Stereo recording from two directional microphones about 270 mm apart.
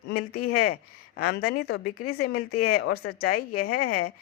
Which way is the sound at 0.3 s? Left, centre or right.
Left.